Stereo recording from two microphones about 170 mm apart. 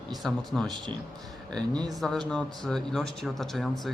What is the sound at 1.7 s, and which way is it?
Speech, 25° right (ahead or behind).